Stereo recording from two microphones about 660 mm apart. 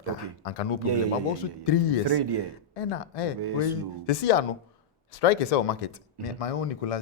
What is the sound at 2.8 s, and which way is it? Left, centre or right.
Speech, left.